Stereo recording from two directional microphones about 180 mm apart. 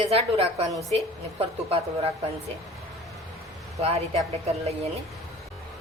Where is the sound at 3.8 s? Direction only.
35° right (ahead or behind).